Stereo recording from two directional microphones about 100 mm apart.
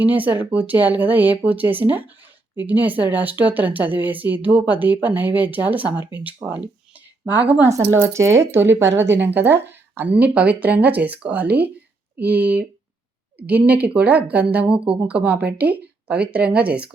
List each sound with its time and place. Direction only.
0.0 s speech: 15° right (ahead or behind)
6.9 s a sound: 15° right (ahead or behind)
7.7 s speech: 30° right (ahead or behind); by 16.9 s 10° right (ahead or behind)